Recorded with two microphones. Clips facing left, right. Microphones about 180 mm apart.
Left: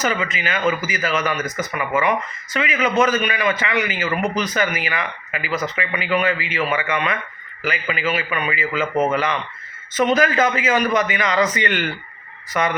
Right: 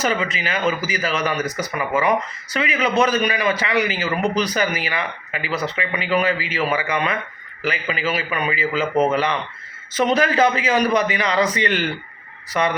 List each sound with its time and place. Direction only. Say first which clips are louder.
0.0 s a man's voice: right 1 dB; 35° right (ahead or behind)